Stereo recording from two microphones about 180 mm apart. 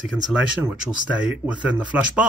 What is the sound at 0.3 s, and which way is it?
Speech, 5° right (ahead or behind).